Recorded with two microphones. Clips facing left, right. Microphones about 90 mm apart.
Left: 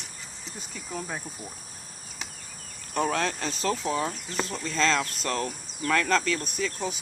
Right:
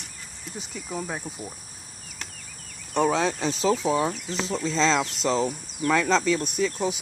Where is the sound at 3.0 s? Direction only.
5° right (ahead or behind).